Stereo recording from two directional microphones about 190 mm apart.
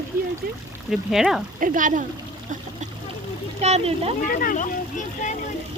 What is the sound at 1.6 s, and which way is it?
Speech, 45° right (ahead or behind).